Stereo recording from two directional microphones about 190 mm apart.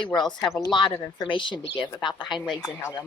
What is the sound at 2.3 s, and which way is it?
Speech, centre (ahead or behind).